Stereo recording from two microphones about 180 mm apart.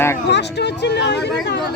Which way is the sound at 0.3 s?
70° left (ahead or behind).